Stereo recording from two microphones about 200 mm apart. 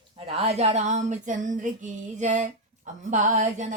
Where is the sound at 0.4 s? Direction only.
35° right (ahead or behind).